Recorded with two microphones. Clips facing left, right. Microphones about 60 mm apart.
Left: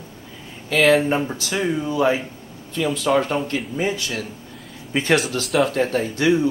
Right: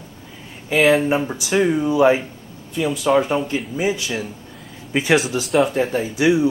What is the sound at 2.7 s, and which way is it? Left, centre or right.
Speech, centre.